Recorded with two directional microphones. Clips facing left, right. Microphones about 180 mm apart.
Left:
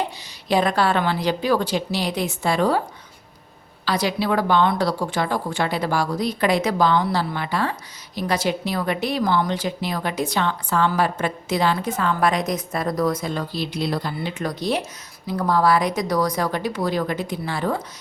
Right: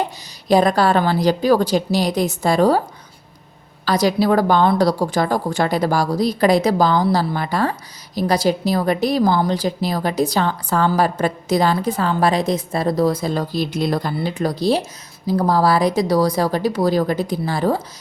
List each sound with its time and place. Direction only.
0.4 s a woman's voice: 40° right (ahead or behind)
3.8 s a woman's voice: 40° right (ahead or behind)
14.2 s a woman's voice: 35° right (ahead or behind)